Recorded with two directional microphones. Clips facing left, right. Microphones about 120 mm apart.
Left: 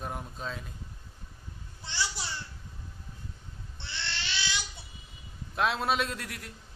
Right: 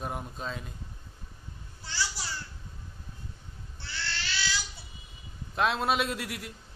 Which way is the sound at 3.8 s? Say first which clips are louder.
Right 1 dB; 20° left (ahead or behind).